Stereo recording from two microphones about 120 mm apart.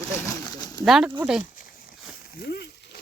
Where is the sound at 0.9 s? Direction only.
5° right (ahead or behind).